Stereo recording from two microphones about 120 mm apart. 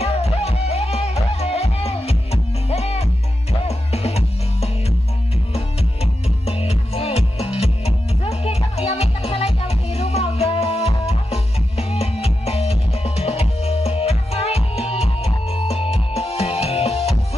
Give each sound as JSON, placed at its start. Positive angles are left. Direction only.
{"t": 0.0, "sound": "music", "side_deg": 60}
{"t": 6.4, "sound": "music", "side_deg": 60}